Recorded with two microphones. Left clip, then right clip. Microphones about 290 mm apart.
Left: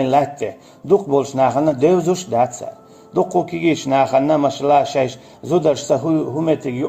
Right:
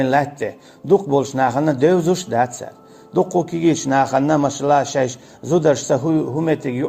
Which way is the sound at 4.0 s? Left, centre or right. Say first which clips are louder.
Left 3 dB; right.